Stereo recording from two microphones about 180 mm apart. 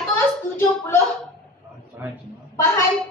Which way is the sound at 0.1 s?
15° left (ahead or behind).